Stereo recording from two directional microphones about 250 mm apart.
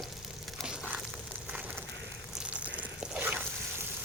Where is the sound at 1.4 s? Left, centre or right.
Centre.